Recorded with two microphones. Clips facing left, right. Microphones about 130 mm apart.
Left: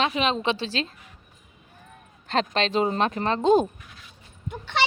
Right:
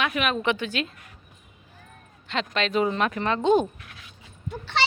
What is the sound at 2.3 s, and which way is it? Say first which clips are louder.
Speech: left 2 dB; 35° left (ahead or behind).